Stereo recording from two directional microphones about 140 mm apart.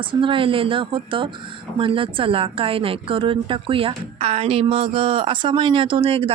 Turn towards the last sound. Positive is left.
turn(degrees=-40)  # may be behind; listen again after turning